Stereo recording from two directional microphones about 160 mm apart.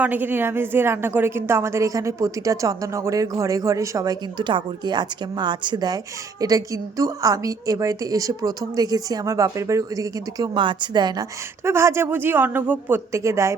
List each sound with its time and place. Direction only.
0.0 s a woman's voice: 10° right (ahead or behind); by 11.3 s 25° right (ahead or behind)
11.6 s speech: 15° right (ahead or behind)